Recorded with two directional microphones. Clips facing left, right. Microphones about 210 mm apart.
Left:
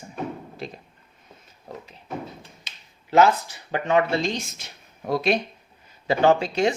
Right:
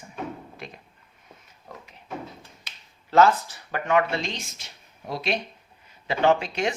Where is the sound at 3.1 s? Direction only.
15° left (ahead or behind); by 5.4 s 50° left (ahead or behind).